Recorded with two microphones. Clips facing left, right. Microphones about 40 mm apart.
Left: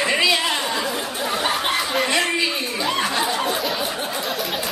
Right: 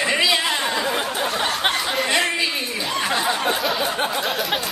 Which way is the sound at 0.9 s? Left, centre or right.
Right.